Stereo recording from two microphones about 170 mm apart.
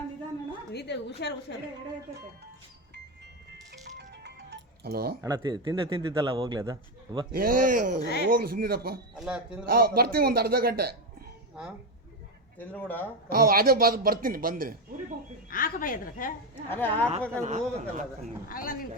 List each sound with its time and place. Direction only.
0.7 s a woman's voice: 75° left (ahead or behind)
3.7 s music: 85° right; by 5.1 s 65° right (ahead or behind)
5.2 s a man's voice: 25° right (ahead or behind)
7.3 s speech: 55° right (ahead or behind)
8.3 s a man's voice: 60° right (ahead or behind)
9.1 s a man's voice: 5° right (ahead or behind)
9.6 s a man's voice: 65° right (ahead or behind)
12.5 s speech: 10° left (ahead or behind)
13.3 s a man's voice: 60° right (ahead or behind)
15.4 s a woman's voice: 55° left (ahead or behind)
16.6 s speech: 10° left (ahead or behind)
17.4 s speech: 45° right (ahead or behind)
18.4 s a woman's voice: 55° left (ahead or behind)